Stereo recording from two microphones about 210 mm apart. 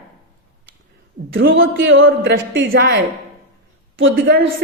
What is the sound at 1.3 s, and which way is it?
A woman's voice, 60° right (ahead or behind).